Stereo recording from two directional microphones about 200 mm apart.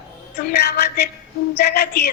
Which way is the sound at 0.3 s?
55° left (ahead or behind).